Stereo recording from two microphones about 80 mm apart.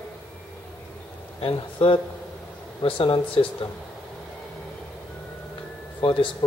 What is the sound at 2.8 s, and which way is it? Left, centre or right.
Speech, left.